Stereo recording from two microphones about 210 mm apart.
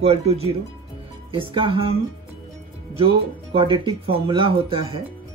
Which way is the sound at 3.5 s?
25° right (ahead or behind).